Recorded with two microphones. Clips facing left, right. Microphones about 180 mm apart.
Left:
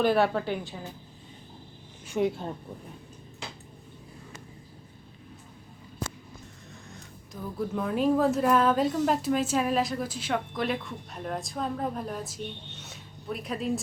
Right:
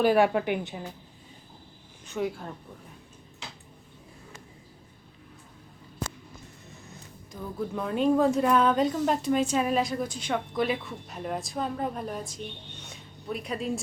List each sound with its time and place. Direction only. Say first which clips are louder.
0.0 s a woman's voice: right 2 dB; 10° right (ahead or behind)
2.0 s speech: left 4 dB; 20° left (ahead or behind)
7.6 s a woman's voice: even; centre (ahead or behind)